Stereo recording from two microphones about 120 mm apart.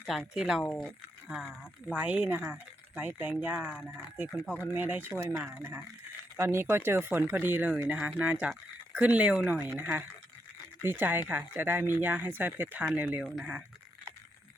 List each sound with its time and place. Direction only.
0.1 s speech: 5° right (ahead or behind)
13.2 s speech: 5° right (ahead or behind)